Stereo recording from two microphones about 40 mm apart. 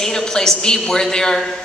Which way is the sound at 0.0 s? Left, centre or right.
Centre.